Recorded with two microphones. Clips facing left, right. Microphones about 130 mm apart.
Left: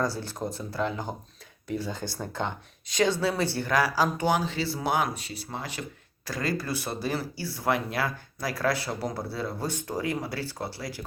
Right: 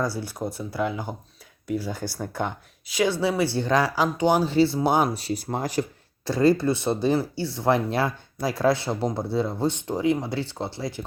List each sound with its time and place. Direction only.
0.0 s speech: 10° right (ahead or behind)
4.5 s speech: 30° right (ahead or behind); by 5.8 s 45° right (ahead or behind)
6.2 s speech: 25° right (ahead or behind)